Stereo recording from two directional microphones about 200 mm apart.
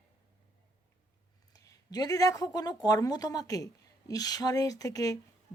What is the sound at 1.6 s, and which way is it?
Speech, 15° left (ahead or behind).